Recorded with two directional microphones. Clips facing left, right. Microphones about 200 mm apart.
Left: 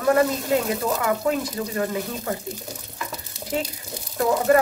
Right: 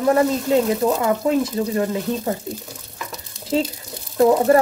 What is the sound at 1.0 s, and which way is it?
Speech, 25° right (ahead or behind).